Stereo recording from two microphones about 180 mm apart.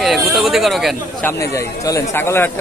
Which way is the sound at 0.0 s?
Centre (ahead or behind).